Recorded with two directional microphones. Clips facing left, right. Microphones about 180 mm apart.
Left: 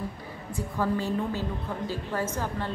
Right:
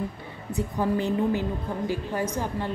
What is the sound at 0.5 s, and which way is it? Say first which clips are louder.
A woman's voice: right 3 dB; 20° right (ahead or behind).